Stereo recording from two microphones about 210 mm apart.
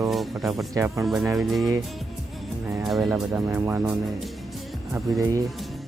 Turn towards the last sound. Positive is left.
turn(degrees=-15)  # may be behind; listen again after turning